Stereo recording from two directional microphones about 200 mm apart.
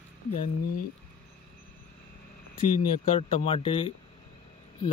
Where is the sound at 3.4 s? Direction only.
25° left (ahead or behind).